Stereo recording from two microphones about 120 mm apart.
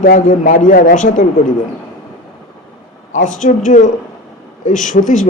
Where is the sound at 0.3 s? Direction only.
90° left.